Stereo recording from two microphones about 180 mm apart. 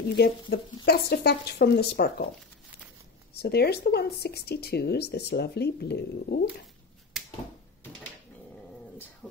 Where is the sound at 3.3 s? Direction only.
60° left (ahead or behind).